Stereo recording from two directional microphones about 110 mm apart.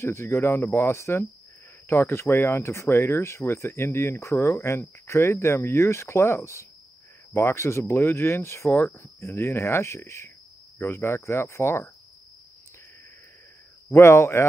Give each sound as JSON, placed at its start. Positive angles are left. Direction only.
{"t": 0.0, "sound": "speech", "side_deg": 25}
{"t": 13.8, "sound": "speech", "side_deg": 25}